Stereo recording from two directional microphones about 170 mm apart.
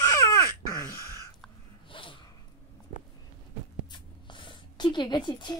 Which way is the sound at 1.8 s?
30° left (ahead or behind).